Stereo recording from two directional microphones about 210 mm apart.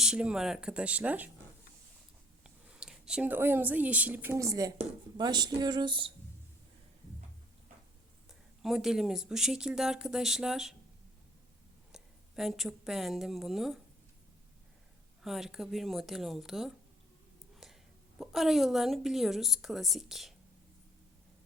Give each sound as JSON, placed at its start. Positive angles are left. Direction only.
{"t": 0.0, "sound": "speech", "side_deg": -5}
{"t": 2.4, "sound": "speech", "side_deg": -5}
{"t": 4.8, "sound": "a sound", "side_deg": -20}
{"t": 8.3, "sound": "speech", "side_deg": 0}
{"t": 11.9, "sound": "a woman's voice", "side_deg": 0}
{"t": 15.2, "sound": "speech", "side_deg": 0}
{"t": 17.6, "sound": "a sound", "side_deg": 0}
{"t": 18.2, "sound": "speech", "side_deg": 0}